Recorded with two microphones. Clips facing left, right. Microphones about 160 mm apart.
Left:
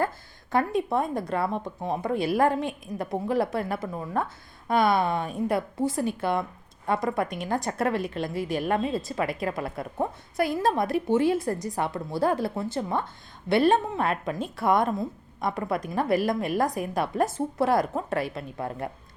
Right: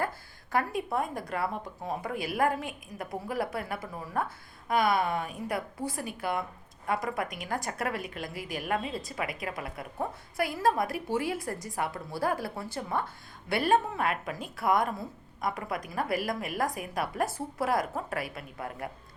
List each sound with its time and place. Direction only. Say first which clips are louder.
0.5 s a woman's voice: left 5 dB; 25° left (ahead or behind)